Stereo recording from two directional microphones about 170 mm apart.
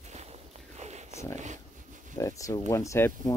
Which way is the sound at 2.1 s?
20° left (ahead or behind).